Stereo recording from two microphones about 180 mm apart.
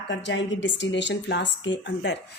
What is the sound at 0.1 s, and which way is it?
Speech, 80° left.